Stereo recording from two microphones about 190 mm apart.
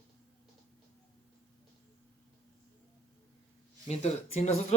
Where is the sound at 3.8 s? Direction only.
35° left (ahead or behind).